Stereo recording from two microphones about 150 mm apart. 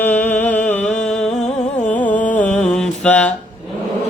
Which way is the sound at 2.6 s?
5° left (ahead or behind).